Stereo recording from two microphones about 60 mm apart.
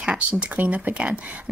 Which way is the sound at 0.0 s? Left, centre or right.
Centre.